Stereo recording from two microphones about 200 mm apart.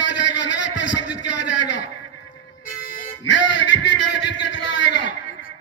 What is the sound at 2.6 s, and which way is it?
Vehicle, 45° left (ahead or behind).